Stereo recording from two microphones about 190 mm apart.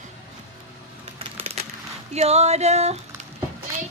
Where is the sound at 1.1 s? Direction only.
30° right (ahead or behind).